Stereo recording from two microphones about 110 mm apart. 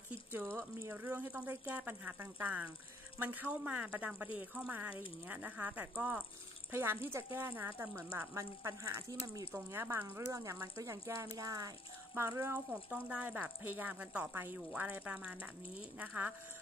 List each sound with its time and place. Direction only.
0.6 s speech: 25° right (ahead or behind)